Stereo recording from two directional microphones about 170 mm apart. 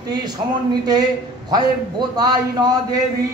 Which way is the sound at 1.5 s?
25° right (ahead or behind).